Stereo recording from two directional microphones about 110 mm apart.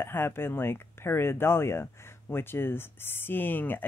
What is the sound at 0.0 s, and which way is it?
Speech, 20° left (ahead or behind).